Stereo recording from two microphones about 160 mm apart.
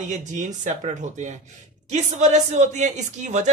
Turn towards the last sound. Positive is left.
turn(degrees=-50)  # may be behind; listen again after turning